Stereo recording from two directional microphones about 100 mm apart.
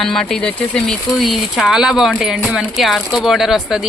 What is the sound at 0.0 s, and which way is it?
Speech, 5° left (ahead or behind).